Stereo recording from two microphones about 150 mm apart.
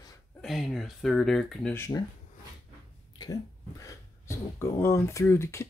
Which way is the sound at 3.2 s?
25° left (ahead or behind).